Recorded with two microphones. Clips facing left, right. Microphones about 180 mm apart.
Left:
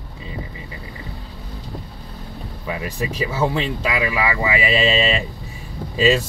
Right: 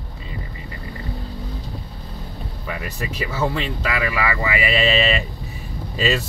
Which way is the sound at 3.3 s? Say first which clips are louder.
Left 1 dB; 15° left (ahead or behind).